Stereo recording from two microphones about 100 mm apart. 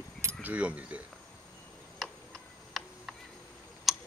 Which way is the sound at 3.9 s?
Centre (ahead or behind).